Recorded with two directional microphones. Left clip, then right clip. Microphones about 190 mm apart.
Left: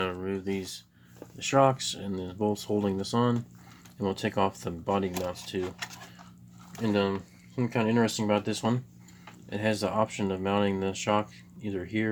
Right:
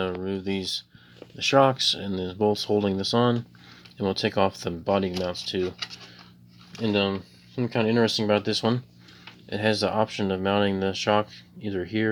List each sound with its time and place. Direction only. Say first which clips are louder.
0.0 s a sound: right 3 dB; 35° right (ahead or behind)
1.4 s speech: right 4 dB; 35° right (ahead or behind)
6.7 s speech: right 3 dB; 35° right (ahead or behind)